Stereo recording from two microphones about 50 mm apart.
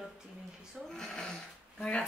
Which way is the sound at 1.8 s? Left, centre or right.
Left.